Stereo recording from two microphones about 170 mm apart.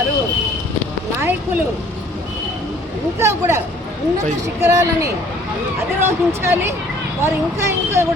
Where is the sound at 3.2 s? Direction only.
15° right (ahead or behind).